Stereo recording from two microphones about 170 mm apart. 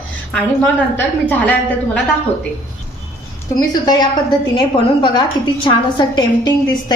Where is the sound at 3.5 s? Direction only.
25° left (ahead or behind).